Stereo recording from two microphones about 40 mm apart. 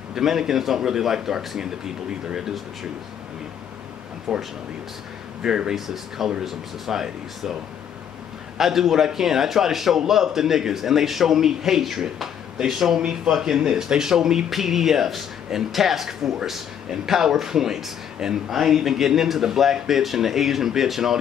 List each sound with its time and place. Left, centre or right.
0.1 s speech: centre
4.3 s speech: centre
5.9 s speech: centre
8.5 s speech: centre